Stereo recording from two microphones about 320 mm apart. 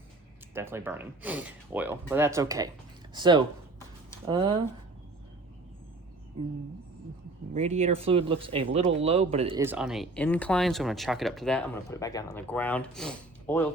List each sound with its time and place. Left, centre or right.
0.5 s speech: centre
7.5 s speech: centre
9.6 s speech: centre